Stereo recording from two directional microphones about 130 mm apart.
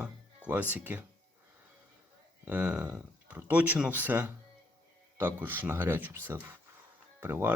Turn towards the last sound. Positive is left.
turn(degrees=-15)  # may be behind; listen again after turning